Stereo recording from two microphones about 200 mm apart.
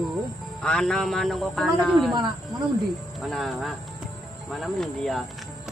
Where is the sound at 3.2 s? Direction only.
Centre (ahead or behind).